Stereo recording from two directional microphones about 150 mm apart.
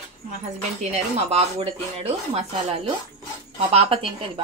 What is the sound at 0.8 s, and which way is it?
Speech, 45° right (ahead or behind).